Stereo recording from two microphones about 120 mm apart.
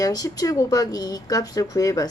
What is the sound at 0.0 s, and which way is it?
A woman's voice, 30° left (ahead or behind).